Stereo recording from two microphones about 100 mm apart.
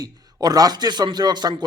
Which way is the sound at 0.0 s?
40° right (ahead or behind).